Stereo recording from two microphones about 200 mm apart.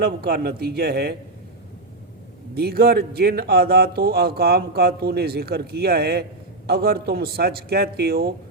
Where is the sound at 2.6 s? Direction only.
50° right (ahead or behind).